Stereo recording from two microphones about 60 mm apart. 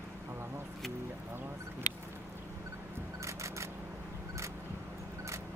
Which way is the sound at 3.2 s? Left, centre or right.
Right.